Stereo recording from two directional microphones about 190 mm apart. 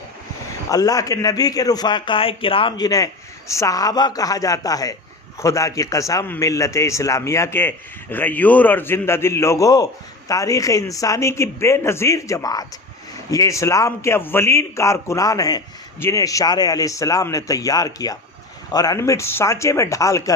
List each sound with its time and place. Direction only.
0.7 s a man's voice: 20° left (ahead or behind)